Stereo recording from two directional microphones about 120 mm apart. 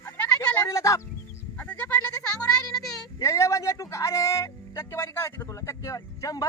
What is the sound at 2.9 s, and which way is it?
Speech, 25° left (ahead or behind).